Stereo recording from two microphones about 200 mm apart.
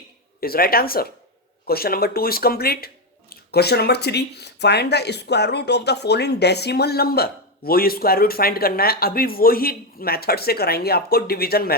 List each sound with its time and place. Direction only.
0.3 s speech: 50° left (ahead or behind)